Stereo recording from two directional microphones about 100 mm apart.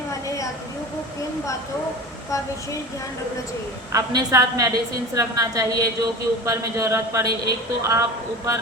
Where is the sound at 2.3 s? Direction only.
35° left (ahead or behind).